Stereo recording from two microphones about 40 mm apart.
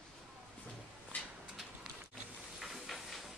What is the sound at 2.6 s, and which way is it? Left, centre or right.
Hiss, centre.